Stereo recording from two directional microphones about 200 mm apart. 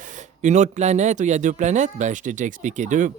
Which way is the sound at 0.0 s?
40° right (ahead or behind).